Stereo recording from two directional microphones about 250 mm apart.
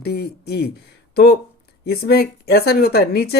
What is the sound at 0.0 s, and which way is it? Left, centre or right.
Speech, left.